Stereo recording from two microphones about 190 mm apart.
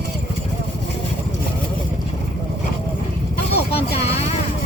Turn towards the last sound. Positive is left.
turn(degrees=30)  # may be behind; listen again after turning